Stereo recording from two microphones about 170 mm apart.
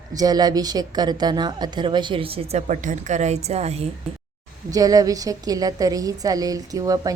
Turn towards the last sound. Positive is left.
turn(degrees=-20)  # may be behind; listen again after turning